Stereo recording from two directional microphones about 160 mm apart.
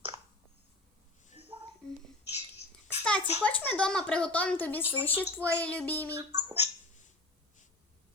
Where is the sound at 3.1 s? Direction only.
5° left (ahead or behind).